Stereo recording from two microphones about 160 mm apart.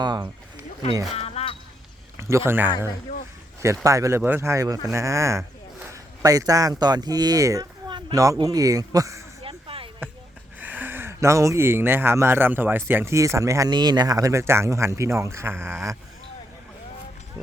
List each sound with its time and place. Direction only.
0.0 s speech: 25° right (ahead or behind)
1.1 s a sound: 40° left (ahead or behind)
2.1 s speech: 15° right (ahead or behind)
3.8 s a man's voice: 20° right (ahead or behind)
9.4 s a sound: 35° right (ahead or behind)
10.6 s speech: 10° right (ahead or behind)